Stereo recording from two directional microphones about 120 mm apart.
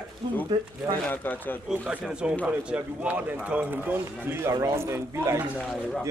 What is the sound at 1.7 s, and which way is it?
Speech, 10° right (ahead or behind).